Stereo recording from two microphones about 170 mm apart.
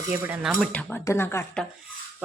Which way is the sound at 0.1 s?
10° right (ahead or behind).